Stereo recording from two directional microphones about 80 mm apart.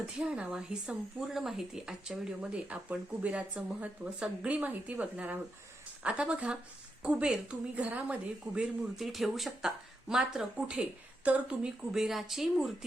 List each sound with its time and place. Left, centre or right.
0.2 s speech: centre
9.0 s speech: centre